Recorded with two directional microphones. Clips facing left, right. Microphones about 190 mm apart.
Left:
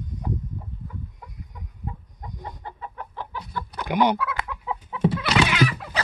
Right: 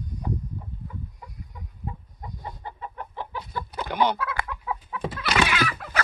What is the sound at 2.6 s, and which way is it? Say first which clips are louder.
Chicken: even; 10° right (ahead or behind).